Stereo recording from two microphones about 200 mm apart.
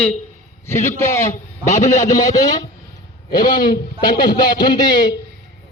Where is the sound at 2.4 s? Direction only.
20° left (ahead or behind).